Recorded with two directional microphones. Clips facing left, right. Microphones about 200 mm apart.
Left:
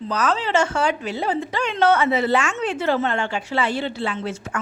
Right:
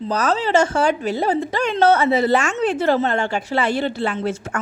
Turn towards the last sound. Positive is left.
turn(degrees=-45)  # may be behind; listen again after turning